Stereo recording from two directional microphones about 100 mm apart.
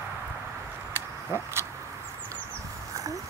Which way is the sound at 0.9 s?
25° right (ahead or behind).